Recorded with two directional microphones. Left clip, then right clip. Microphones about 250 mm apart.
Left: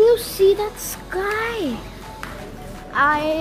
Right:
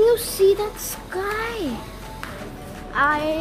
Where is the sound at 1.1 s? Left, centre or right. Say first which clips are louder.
Left 3 dB; centre.